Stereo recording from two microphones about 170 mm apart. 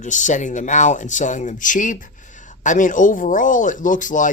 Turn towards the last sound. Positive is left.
turn(degrees=50)  # may be behind; listen again after turning